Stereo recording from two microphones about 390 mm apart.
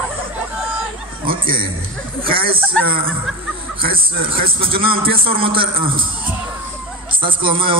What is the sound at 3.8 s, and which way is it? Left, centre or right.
A man's voice, right.